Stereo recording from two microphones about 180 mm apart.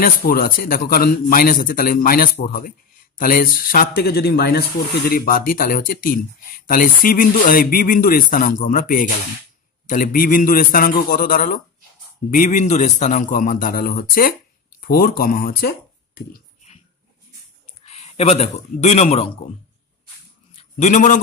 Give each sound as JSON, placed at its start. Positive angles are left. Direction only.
{"t": 0.0, "sound": "speech", "side_deg": 55}
{"t": 17.8, "sound": "speech", "side_deg": 35}
{"t": 20.5, "sound": "a man's voice", "side_deg": 40}